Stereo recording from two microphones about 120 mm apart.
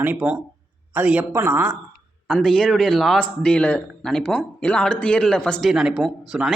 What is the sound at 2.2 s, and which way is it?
Speech, 5° left (ahead or behind).